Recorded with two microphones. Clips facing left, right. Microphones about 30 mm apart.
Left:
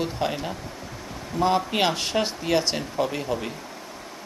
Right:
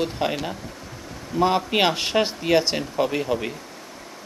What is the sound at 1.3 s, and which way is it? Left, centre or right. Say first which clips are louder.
Speech: right 2 dB; centre.